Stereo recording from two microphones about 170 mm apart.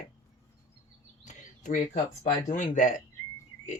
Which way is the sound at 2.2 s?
45° left (ahead or behind).